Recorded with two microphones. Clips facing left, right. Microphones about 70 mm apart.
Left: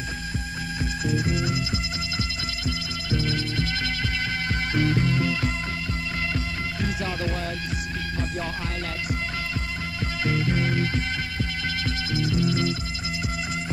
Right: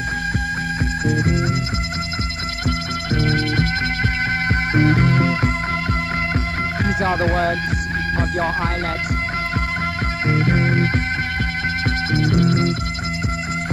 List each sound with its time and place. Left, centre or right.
1.0 s music: right
3.1 s music: right
6.8 s music: right
10.2 s music: right
12.1 s music: right